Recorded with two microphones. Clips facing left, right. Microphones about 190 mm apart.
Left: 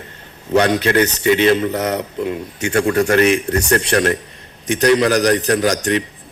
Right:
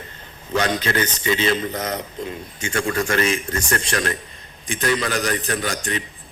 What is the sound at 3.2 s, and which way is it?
Speech, 65° left (ahead or behind).